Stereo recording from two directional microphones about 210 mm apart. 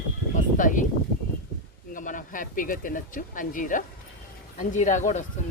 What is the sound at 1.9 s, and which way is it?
Speech, 40° left (ahead or behind).